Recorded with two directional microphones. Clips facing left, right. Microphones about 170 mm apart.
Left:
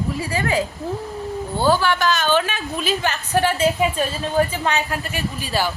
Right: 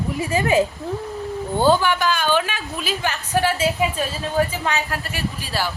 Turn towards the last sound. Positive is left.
turn(degrees=-5)  # may be behind; listen again after turning